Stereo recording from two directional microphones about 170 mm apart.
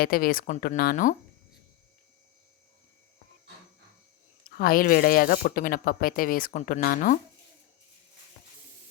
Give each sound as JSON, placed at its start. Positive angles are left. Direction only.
{"t": 0.0, "sound": "speech", "side_deg": 60}
{"t": 4.4, "sound": "speech", "side_deg": 60}